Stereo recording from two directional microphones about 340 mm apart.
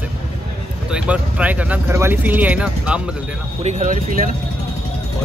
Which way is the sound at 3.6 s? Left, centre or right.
Right.